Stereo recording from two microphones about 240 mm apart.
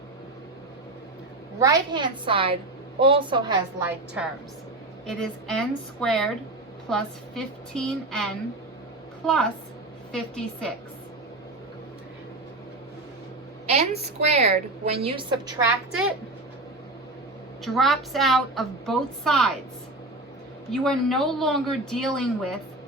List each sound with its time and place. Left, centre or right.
1.5 s a woman's voice: centre
3.8 s a woman's voice: centre
13.7 s a woman's voice: right
15.9 s a woman's voice: centre
17.6 s a woman's voice: centre
20.7 s a woman's voice: centre